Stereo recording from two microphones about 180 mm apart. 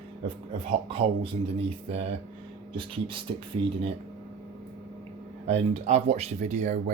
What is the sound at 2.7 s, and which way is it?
Speech, 30° right (ahead or behind).